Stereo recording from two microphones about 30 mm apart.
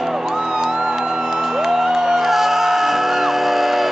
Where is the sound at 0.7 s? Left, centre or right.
Right.